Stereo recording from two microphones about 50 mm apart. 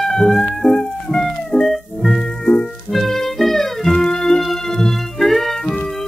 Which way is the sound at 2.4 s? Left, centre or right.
Centre.